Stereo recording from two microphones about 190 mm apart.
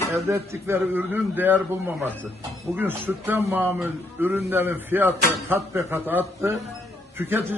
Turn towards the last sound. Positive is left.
turn(degrees=-10)  # may be behind; listen again after turning